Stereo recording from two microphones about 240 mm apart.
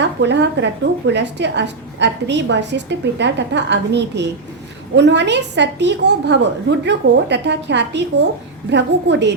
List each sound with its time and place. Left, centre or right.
0.0 s a woman's voice: right